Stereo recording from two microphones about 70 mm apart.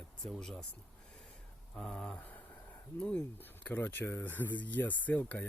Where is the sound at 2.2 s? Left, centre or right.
Left.